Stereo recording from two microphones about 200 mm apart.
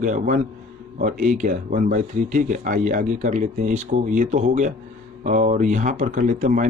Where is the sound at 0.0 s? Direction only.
40° right (ahead or behind).